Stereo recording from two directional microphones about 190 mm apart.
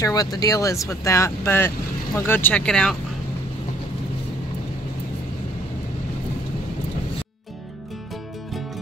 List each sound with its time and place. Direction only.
0.0 s speech: 20° left (ahead or behind); by 3.0 s 5° left (ahead or behind)